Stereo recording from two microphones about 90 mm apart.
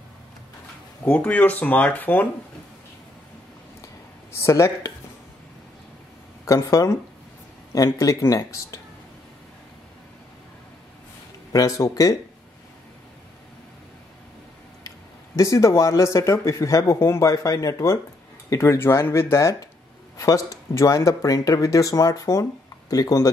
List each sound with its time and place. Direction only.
1.0 s speech: 20° left (ahead or behind)
3.8 s a sound: 35° left (ahead or behind)
6.4 s speech: 35° left (ahead or behind)
11.5 s speech: 40° left (ahead or behind)
15.3 s speech: 35° left (ahead or behind)